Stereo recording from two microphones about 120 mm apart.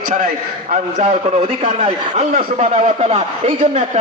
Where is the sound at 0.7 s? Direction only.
80° right.